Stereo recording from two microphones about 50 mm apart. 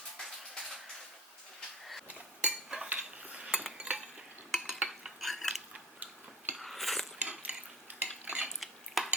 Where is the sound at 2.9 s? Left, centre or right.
Right.